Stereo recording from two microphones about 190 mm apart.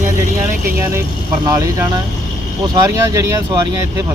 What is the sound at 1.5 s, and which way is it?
Speech, 15° right (ahead or behind).